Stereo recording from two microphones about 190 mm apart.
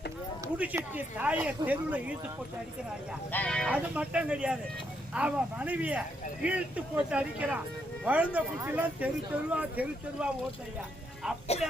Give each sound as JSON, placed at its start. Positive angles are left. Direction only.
{"t": 0.4, "sound": "speech", "side_deg": -10}
{"t": 3.3, "sound": "speech", "side_deg": 5}
{"t": 3.7, "sound": "speech", "side_deg": -5}
{"t": 11.5, "sound": "speech", "side_deg": 35}